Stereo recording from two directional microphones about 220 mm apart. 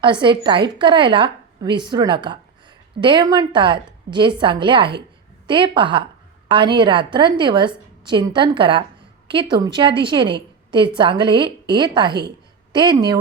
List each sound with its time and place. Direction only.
0.0 s a woman's voice: 20° right (ahead or behind)